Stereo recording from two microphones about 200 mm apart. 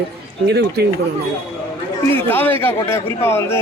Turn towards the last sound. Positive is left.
turn(degrees=10)  # may be behind; listen again after turning